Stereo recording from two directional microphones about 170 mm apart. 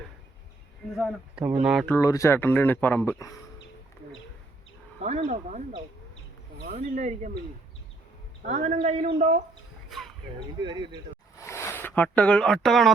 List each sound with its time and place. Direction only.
0.9 s speech: 5° right (ahead or behind)
1.9 s speech: 20° left (ahead or behind)
4.9 s a man's voice: 40° right (ahead or behind)
6.7 s a man's voice: 50° right (ahead or behind)
8.4 s a man's voice: 45° right (ahead or behind)
9.9 s a sound: centre (ahead or behind)
10.6 s speech: 25° right (ahead or behind)
11.3 s a sound: 15° left (ahead or behind); by 12.9 s centre (ahead or behind)